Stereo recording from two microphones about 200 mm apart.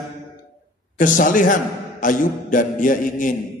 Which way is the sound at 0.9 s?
40° left (ahead or behind).